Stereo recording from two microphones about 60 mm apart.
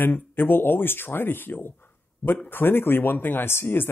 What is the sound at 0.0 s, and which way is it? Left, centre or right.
Speech, left.